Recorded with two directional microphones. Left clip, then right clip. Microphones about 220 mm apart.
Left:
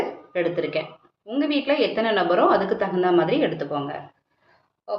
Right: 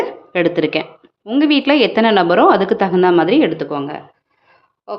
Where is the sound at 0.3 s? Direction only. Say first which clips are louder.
Right 8 dB; 50° right (ahead or behind).